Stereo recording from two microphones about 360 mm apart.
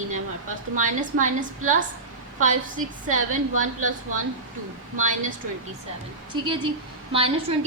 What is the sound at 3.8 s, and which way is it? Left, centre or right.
Speech, right.